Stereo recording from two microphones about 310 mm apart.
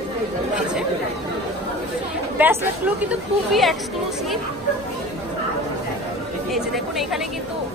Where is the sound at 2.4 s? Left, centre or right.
Centre.